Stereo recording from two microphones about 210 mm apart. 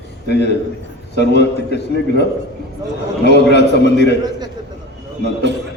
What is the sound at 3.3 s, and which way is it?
Speech, 55° left (ahead or behind).